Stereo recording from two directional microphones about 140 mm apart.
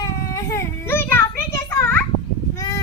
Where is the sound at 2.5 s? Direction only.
20° left (ahead or behind).